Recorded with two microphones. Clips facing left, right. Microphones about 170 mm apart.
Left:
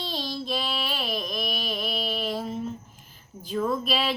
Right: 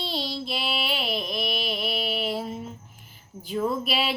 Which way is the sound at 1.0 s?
5° right (ahead or behind).